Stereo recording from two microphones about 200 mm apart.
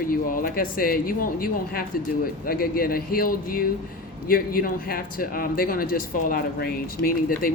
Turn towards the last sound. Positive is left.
turn(degrees=45)  # may be behind; listen again after turning